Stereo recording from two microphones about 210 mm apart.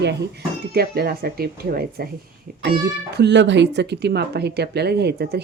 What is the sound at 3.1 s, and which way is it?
Speech, 55° right (ahead or behind).